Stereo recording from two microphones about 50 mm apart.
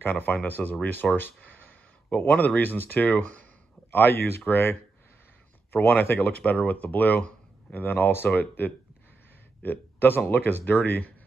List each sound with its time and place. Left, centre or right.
0.0 s speech: left
6.1 s speech: left